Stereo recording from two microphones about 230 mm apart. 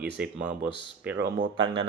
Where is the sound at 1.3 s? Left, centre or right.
Right.